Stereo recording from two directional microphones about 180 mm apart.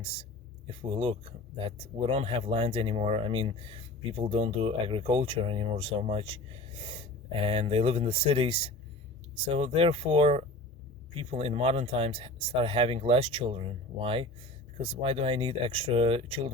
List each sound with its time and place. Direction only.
0.0 s speech: 30° right (ahead or behind)